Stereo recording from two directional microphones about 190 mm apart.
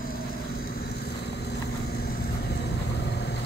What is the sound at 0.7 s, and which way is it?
Vehicle, 55° left (ahead or behind).